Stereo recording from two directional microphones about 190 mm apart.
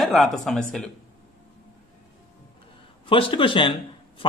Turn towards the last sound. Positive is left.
turn(degrees=25)  # may be behind; listen again after turning